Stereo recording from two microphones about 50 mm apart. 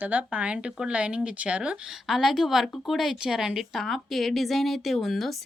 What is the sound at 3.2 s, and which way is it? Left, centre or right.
Speech, centre.